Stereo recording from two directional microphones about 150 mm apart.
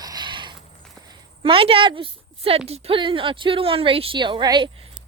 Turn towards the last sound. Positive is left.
turn(degrees=-30)  # may be behind; listen again after turning